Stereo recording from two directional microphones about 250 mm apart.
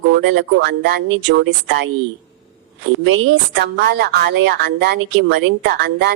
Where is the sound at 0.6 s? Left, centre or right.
Right.